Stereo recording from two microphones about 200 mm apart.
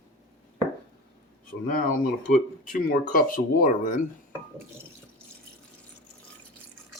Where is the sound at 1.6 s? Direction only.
45° left (ahead or behind).